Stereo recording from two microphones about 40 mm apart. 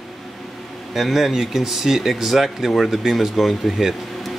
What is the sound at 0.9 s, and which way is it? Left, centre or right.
Speech, centre.